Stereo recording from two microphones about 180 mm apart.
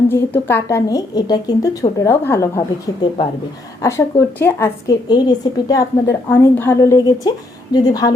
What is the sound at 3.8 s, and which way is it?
A woman's voice, 15° left (ahead or behind).